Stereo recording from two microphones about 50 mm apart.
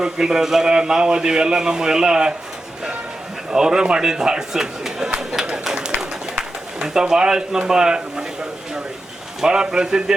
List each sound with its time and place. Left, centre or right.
0.0 s a man's voice: centre
3.5 s a man's voice: centre
5.6 s a sound: centre
6.3 s a man's voice: centre
9.4 s a man's voice: centre